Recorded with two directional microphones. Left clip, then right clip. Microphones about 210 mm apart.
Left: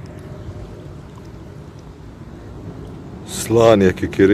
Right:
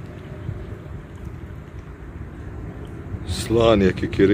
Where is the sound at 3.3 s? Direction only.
10° left (ahead or behind).